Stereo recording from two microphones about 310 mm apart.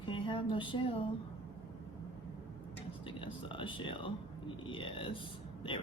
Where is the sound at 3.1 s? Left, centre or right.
Centre.